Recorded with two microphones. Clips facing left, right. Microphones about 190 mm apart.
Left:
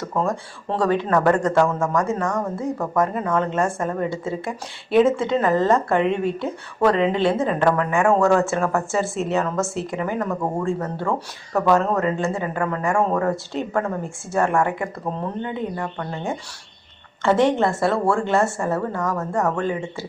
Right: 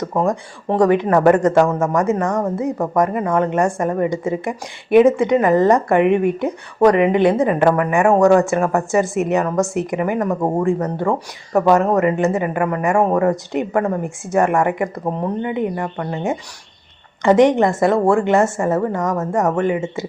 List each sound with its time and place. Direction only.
0.0 s speech: 15° right (ahead or behind)